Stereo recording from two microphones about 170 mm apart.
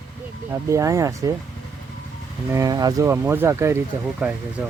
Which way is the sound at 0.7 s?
15° right (ahead or behind).